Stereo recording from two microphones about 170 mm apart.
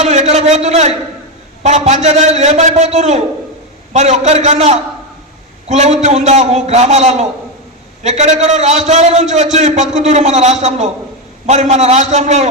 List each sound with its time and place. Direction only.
0.0 s a man's voice: 40° right (ahead or behind)